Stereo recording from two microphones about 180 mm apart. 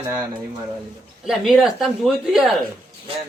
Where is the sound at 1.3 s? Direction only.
Centre (ahead or behind).